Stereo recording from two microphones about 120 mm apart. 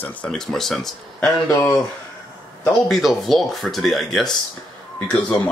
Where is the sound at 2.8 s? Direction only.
Centre (ahead or behind).